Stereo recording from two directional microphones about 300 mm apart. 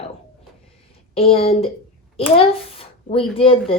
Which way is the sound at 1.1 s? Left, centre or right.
Centre.